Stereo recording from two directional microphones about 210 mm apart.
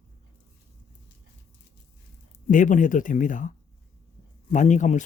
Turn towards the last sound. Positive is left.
turn(degrees=35)  # may be behind; listen again after turning